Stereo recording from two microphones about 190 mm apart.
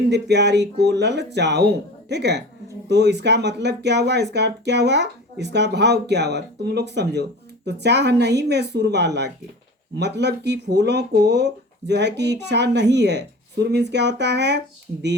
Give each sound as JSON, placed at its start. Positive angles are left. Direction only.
{"t": 0.1, "sound": "speech", "side_deg": -60}